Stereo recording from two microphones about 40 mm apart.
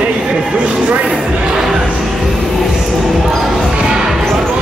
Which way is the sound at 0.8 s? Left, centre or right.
Right.